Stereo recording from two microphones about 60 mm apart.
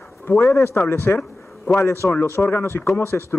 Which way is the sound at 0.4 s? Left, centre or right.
Left.